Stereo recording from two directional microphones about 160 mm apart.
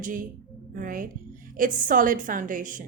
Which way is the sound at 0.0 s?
55° right (ahead or behind).